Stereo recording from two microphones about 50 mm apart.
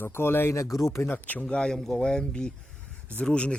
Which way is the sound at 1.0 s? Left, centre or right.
Left.